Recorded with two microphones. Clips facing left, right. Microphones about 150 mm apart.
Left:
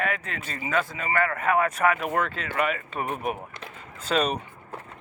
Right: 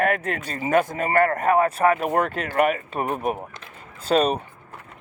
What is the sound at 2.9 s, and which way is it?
Speech, 35° right (ahead or behind).